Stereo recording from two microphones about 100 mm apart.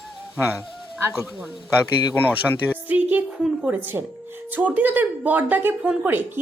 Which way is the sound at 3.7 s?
20° right (ahead or behind).